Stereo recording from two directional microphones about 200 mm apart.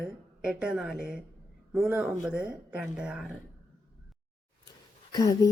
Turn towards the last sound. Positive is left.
turn(degrees=20)  # may be behind; listen again after turning